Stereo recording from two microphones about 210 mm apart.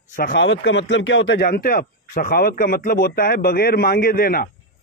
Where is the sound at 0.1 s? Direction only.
50° left (ahead or behind).